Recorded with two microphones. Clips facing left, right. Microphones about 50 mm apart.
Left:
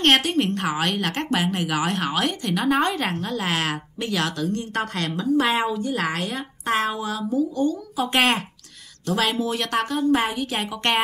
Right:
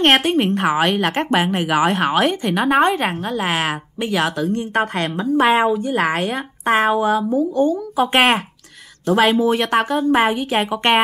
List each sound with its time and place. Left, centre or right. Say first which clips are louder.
0.0 s a woman's voice: right 4 dB; right
9.2 s a woman's voice: right 8 dB; right